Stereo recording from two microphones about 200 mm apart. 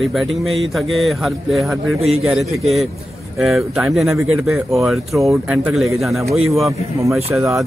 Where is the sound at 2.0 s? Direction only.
30° right (ahead or behind).